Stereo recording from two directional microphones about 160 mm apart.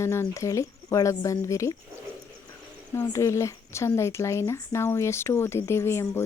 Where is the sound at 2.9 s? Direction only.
15° left (ahead or behind).